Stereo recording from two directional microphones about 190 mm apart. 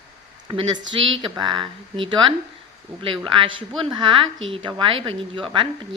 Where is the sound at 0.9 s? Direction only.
25° right (ahead or behind).